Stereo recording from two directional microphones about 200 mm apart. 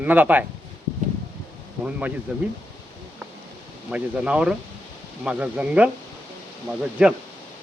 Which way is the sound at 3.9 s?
5° right (ahead or behind).